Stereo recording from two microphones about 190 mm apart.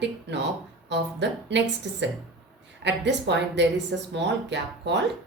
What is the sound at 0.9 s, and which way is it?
A woman's voice, 65° right (ahead or behind).